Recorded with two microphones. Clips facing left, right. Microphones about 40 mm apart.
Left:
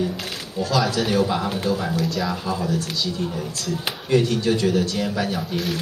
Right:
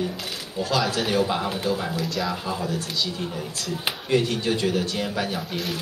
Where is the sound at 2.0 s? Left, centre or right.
Centre.